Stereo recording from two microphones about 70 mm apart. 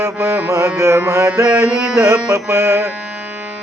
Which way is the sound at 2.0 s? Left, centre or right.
Right.